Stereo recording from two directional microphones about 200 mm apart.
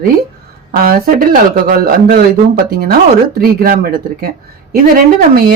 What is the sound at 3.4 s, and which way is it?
Speech, 45° right (ahead or behind).